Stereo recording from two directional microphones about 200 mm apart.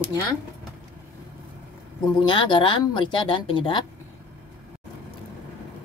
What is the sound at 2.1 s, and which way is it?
Speech, 25° left (ahead or behind).